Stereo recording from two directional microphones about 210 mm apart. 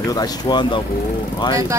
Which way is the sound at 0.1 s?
20° left (ahead or behind).